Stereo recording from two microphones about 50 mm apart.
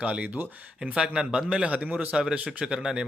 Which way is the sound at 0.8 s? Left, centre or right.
Centre.